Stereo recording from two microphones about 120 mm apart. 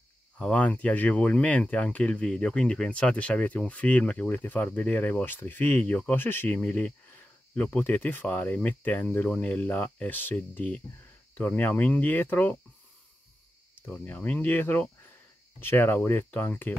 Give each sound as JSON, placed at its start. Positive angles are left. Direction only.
{"t": 0.4, "sound": "speech", "side_deg": 10}
{"t": 13.7, "sound": "speech", "side_deg": 15}